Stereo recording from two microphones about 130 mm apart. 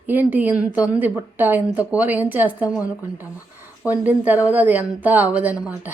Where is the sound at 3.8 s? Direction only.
10° right (ahead or behind).